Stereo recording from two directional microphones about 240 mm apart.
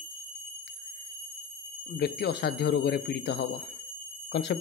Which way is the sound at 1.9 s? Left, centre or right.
Left.